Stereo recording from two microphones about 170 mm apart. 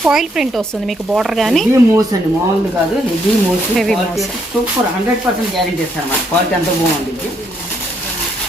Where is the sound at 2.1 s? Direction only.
20° right (ahead or behind).